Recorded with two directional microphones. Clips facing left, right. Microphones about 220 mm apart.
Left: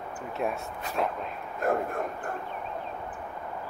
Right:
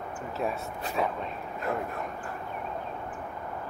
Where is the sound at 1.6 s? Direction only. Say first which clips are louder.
Left 5 dB; 50° left (ahead or behind).